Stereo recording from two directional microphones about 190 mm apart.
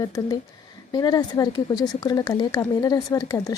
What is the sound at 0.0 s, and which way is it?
A woman's voice, 20° left (ahead or behind).